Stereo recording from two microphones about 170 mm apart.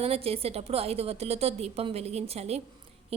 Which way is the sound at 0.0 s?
35° right (ahead or behind).